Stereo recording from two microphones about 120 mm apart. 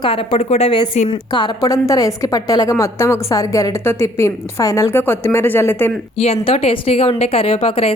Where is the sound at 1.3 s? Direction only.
35° left (ahead or behind); by 5.9 s 20° left (ahead or behind).